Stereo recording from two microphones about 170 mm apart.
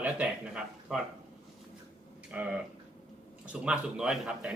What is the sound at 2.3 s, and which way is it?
Speech, 10° right (ahead or behind).